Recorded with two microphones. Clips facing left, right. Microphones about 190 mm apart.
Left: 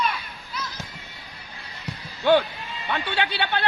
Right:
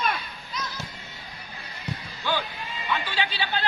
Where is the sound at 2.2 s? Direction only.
60° left (ahead or behind).